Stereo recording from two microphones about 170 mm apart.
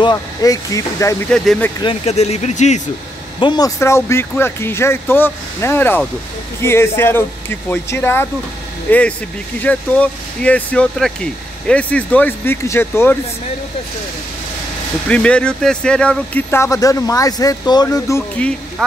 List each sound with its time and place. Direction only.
0.0 s speech: 20° left (ahead or behind)
1.3 s speech: centre (ahead or behind)
1.8 s speech: 35° left (ahead or behind)
3.3 s speech: 25° left (ahead or behind)
15.0 s speech: 5° left (ahead or behind)
18.8 s speech: 5° left (ahead or behind)